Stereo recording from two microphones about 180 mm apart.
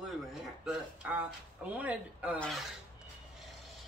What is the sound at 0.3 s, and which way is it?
Speech, 5° right (ahead or behind).